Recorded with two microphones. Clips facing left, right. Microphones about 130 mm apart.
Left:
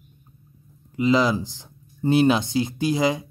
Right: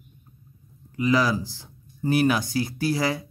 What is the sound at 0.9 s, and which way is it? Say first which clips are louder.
Speech: left 2 dB; 20° left (ahead or behind).